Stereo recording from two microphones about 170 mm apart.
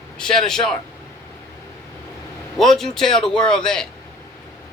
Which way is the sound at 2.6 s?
Centre (ahead or behind).